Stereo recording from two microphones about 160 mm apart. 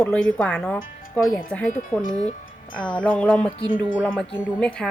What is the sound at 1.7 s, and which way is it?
Speech, 55° left (ahead or behind).